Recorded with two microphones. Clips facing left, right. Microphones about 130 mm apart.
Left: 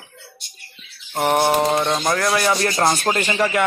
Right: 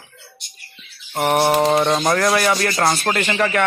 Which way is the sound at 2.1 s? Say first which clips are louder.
Right 2 dB; centre (ahead or behind).